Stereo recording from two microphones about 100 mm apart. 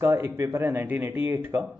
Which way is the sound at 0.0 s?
25° right (ahead or behind).